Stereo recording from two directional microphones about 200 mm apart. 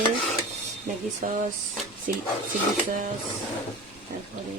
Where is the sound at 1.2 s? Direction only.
40° right (ahead or behind).